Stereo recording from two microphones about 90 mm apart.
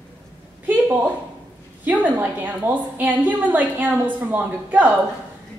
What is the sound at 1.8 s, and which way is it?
A woman's voice, 20° right (ahead or behind).